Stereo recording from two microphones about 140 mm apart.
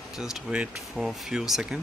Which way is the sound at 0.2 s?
5° right (ahead or behind).